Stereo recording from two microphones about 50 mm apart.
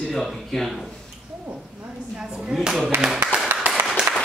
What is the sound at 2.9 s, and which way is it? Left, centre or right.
Speech, right.